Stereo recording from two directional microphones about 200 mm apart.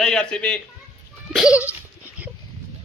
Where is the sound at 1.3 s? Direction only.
5° right (ahead or behind).